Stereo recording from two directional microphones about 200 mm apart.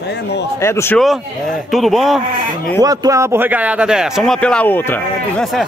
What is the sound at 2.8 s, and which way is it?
A man's voice, 15° right (ahead or behind).